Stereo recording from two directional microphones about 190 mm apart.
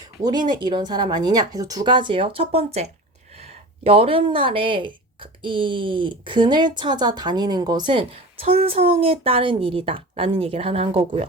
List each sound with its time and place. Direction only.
0.2 s speech: 20° right (ahead or behind)